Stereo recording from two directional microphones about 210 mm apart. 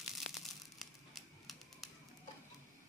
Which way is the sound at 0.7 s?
Centre (ahead or behind).